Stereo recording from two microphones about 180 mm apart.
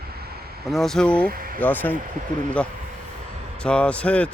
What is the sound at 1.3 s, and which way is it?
Speech, 55° right (ahead or behind).